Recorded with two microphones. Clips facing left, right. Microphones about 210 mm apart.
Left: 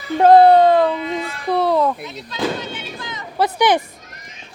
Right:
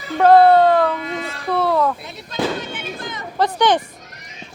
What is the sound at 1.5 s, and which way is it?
Bleat, 15° left (ahead or behind).